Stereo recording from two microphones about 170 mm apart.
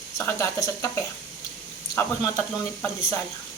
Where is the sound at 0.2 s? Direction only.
15° left (ahead or behind).